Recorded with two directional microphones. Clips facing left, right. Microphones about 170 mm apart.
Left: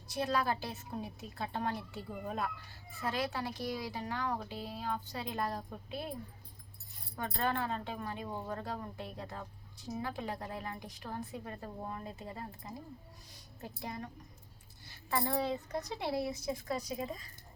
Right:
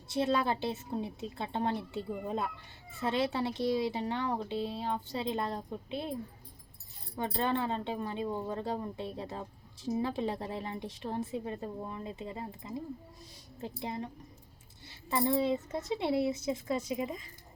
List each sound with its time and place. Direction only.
0.1 s speech: 25° right (ahead or behind)
7.2 s speech: 20° right (ahead or behind)